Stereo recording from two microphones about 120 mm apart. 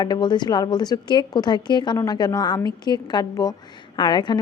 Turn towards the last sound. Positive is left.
turn(degrees=40)  # may be behind; listen again after turning